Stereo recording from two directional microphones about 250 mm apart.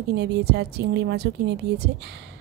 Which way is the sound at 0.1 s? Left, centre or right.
Right.